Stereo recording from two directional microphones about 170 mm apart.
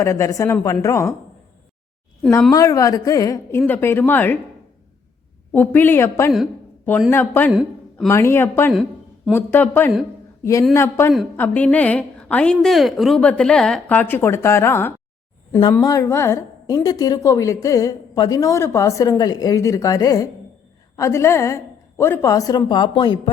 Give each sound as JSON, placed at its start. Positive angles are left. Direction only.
{"t": 0.0, "sound": "a woman's voice", "side_deg": 15}
{"t": 2.5, "sound": "a woman's voice", "side_deg": 20}
{"t": 5.5, "sound": "a woman's voice", "side_deg": 10}
{"t": 7.5, "sound": "a sound", "side_deg": -5}
{"t": 8.0, "sound": "a woman's voice", "side_deg": 15}
{"t": 8.7, "sound": "a sound", "side_deg": 0}
{"t": 9.3, "sound": "a woman's voice", "side_deg": 10}